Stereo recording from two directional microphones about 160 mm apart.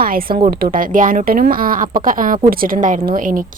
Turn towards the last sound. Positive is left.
turn(degrees=-55)  # may be behind; listen again after turning